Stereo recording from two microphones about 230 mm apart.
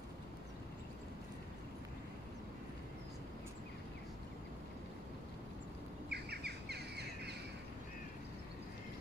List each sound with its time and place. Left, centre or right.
6.0 s bird: right